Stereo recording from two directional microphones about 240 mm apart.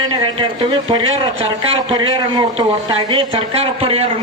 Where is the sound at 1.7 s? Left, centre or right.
Right.